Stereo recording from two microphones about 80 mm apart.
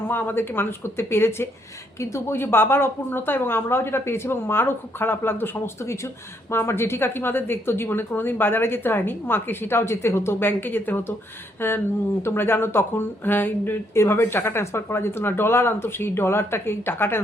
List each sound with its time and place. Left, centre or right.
0.1 s speech: left